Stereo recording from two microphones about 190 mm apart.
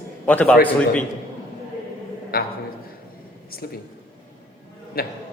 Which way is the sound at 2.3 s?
50° left (ahead or behind).